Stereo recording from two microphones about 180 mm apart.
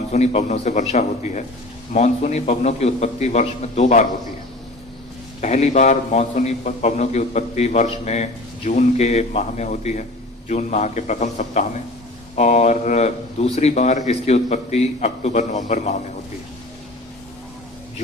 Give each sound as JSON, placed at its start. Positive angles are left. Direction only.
{"t": 0.1, "sound": "a man's voice", "side_deg": 40}
{"t": 5.4, "sound": "a man's voice", "side_deg": 40}